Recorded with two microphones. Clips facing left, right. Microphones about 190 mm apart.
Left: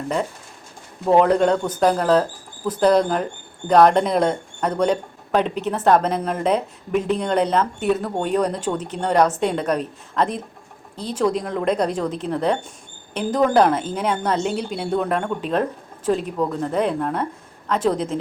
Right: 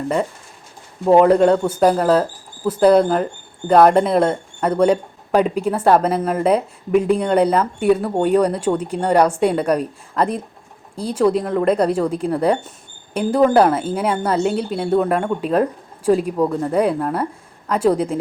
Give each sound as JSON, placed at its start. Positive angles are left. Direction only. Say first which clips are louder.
{"t": 1.2, "sound": "a woman's voice", "louder": "right 4 dB", "side_deg": -5}